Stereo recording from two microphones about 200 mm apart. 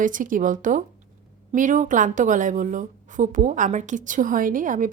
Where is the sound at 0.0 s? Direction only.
40° right (ahead or behind).